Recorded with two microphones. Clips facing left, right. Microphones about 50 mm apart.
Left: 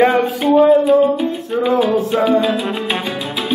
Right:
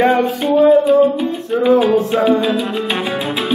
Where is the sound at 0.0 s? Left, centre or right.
Centre.